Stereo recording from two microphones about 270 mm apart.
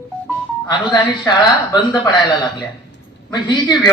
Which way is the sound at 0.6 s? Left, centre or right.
Centre.